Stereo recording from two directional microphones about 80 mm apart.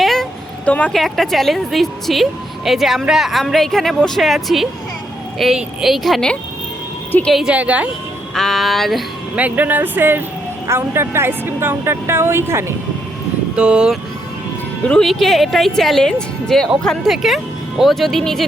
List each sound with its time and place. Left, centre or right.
0.0 s a sound: centre
0.6 s speech: centre
0.9 s a woman's voice: centre
7.4 s a woman's voice: centre
8.4 s a woman's voice: centre
9.3 s speech: right
13.6 s a woman's voice: centre
14.8 s a woman's voice: centre